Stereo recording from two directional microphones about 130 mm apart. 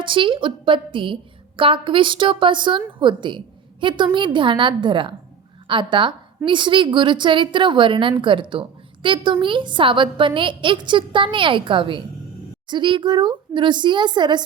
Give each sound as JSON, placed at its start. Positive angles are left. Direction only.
{"t": 0.0, "sound": "a woman's voice", "side_deg": -40}